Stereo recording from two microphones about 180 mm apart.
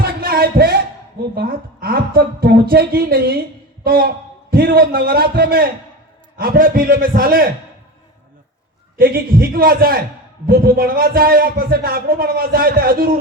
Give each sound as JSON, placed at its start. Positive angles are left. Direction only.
{"t": 0.0, "sound": "music", "side_deg": -55}
{"t": 1.4, "sound": "a man's voice", "side_deg": -55}
{"t": 9.0, "sound": "a man's voice", "side_deg": -55}